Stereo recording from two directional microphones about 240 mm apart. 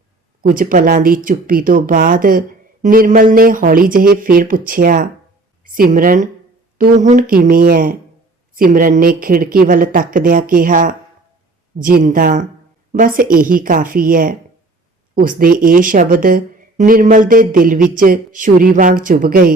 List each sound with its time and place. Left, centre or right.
0.4 s speech: right